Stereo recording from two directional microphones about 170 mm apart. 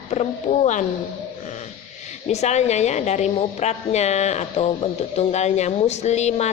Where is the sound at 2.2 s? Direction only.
40° left (ahead or behind).